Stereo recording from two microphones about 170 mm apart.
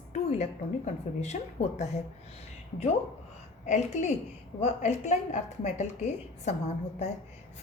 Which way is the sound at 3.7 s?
45° left (ahead or behind).